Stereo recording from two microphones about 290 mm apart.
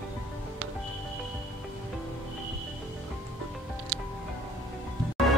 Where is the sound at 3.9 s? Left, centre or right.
Right.